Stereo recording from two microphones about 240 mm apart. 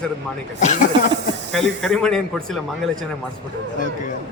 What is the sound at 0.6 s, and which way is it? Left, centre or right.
Speech, left.